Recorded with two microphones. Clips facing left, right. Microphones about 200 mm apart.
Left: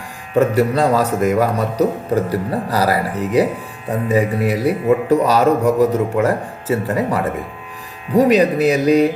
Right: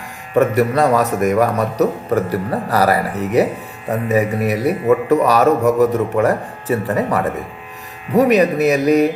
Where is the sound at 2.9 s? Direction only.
25° right (ahead or behind).